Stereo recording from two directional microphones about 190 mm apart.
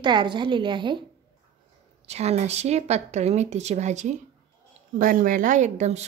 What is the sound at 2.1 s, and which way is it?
Speech, 35° right (ahead or behind).